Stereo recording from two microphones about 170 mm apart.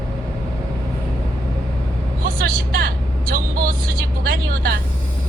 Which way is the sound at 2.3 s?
60° right (ahead or behind).